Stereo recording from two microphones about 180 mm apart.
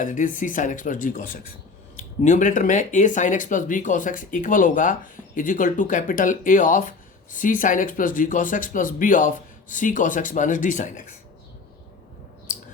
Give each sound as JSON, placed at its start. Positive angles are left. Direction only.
{"t": 0.0, "sound": "speech", "side_deg": 45}